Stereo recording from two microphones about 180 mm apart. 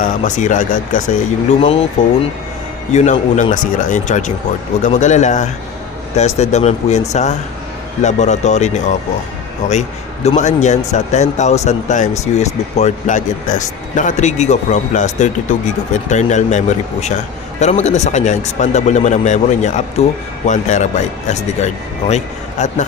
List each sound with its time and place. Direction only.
0.0 s speech: 45° left (ahead or behind)
2.9 s speech: 40° left (ahead or behind)
10.2 s speech: 40° left (ahead or behind)